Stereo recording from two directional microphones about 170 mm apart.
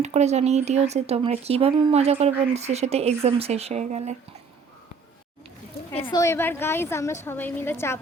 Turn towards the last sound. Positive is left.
turn(degrees=15)  # may be behind; listen again after turning